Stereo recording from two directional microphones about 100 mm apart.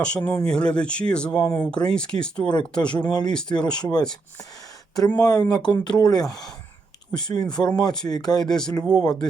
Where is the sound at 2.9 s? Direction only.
45° left (ahead or behind).